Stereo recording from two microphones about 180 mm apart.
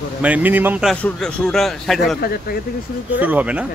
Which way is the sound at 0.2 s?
10° right (ahead or behind).